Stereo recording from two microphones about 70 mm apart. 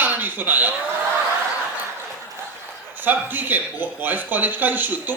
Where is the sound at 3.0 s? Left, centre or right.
Right.